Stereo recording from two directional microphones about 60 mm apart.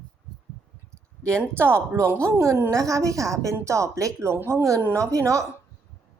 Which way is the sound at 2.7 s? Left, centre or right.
Right.